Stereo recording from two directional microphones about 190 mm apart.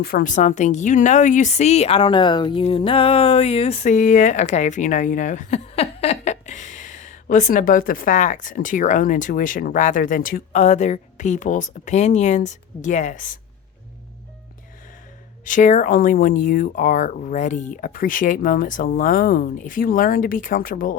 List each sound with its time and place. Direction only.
0.0 s speech: 50° left (ahead or behind)
15.4 s speech: 40° left (ahead or behind)